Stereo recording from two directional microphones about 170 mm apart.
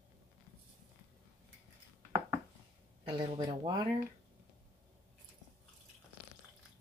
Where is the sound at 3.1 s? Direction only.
25° right (ahead or behind).